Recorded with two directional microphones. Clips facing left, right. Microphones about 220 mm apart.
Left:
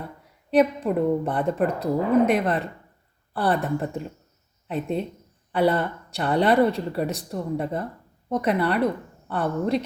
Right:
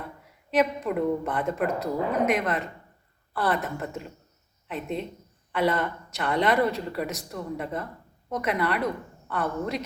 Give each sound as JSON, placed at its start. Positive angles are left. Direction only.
{"t": 0.5, "sound": "speech", "side_deg": 35}